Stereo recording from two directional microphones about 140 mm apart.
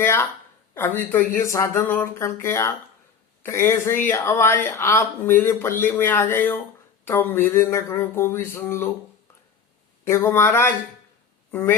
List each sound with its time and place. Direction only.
0.0 s speech: 15° left (ahead or behind)
10.0 s speech: 20° left (ahead or behind)